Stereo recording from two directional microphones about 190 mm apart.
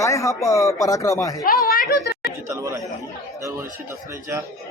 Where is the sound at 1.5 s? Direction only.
50° left (ahead or behind).